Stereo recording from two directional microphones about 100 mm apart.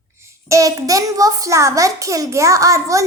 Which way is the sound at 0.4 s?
35° right (ahead or behind).